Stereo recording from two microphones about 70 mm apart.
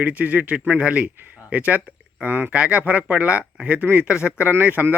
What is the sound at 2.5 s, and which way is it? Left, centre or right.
A man's voice, centre.